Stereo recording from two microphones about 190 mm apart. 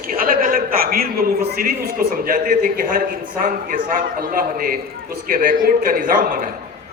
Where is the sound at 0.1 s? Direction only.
50° right (ahead or behind).